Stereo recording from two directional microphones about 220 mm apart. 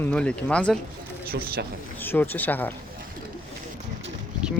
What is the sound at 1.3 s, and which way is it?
Speech, 45° right (ahead or behind).